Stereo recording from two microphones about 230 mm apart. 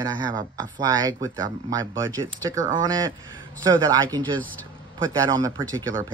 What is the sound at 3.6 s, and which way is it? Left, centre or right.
Speech, centre.